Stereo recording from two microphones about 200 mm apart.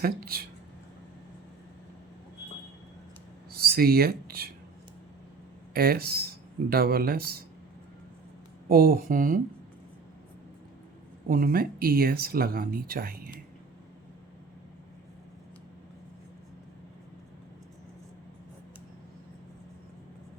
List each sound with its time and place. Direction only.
0.0 s speech: 50° right (ahead or behind)
3.5 s a sound: 50° right (ahead or behind)
5.7 s speech: 50° right (ahead or behind)
8.7 s speech: 45° right (ahead or behind)
11.3 s speech: 45° right (ahead or behind)